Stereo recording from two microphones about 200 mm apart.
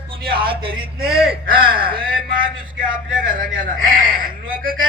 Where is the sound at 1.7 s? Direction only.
45° right (ahead or behind).